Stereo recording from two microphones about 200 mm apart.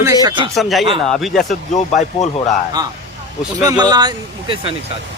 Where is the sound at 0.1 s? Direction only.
20° right (ahead or behind).